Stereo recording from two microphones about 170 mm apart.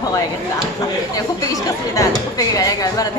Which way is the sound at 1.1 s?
20° left (ahead or behind).